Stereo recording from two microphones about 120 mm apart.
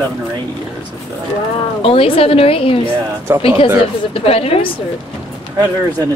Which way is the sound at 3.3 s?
20° right (ahead or behind).